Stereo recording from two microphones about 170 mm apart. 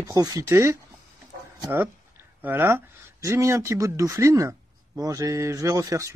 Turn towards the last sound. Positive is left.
turn(degrees=-20)  # may be behind; listen again after turning